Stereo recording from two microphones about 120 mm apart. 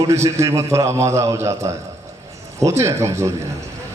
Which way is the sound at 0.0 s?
25° right (ahead or behind).